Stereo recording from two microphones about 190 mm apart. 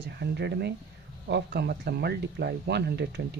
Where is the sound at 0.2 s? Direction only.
60° right (ahead or behind).